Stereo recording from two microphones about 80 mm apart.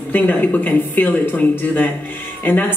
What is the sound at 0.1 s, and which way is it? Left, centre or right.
A man's voice, left.